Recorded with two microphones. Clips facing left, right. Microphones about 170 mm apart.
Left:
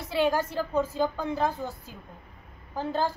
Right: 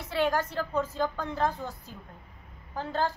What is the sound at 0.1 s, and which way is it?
A woman's voice, 10° left (ahead or behind).